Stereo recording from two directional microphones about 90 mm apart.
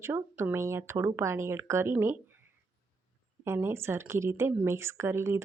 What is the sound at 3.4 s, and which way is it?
Speech, 25° right (ahead or behind).